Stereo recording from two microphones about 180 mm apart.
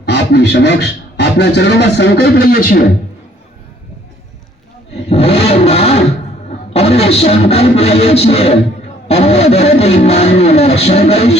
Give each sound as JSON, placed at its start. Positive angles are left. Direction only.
{"t": 0.0, "sound": "speech", "side_deg": 70}
{"t": 5.0, "sound": "a sound", "side_deg": 35}
{"t": 6.7, "sound": "music", "side_deg": 35}